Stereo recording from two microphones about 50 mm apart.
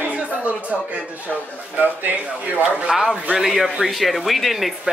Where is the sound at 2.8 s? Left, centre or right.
Centre.